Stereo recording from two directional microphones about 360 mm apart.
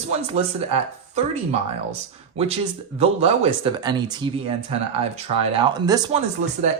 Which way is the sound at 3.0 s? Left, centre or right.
Centre.